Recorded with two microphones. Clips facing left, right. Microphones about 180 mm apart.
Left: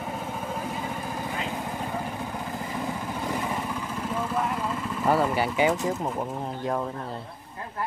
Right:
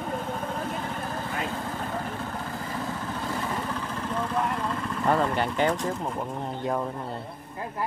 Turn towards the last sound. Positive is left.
turn(degrees=0)  # may be behind; listen again after turning